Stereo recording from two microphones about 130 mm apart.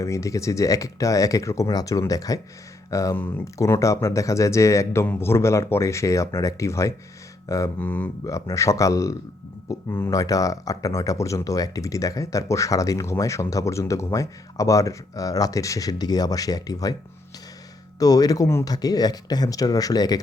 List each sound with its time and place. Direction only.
0.0 s speech: 25° left (ahead or behind)
8.2 s speech: 25° left (ahead or behind)
18.0 s speech: 30° left (ahead or behind)